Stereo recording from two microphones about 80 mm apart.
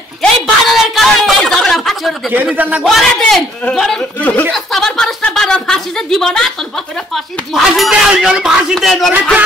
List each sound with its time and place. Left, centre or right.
0.2 s a sound: centre
2.5 s a man's voice: right
2.9 s a man's voice: centre
4.2 s a woman's voice: centre
4.5 s a woman's voice: centre
8.7 s a man's voice: centre